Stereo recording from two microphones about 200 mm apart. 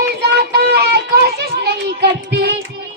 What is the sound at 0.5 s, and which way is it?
Child singing, 55° right (ahead or behind).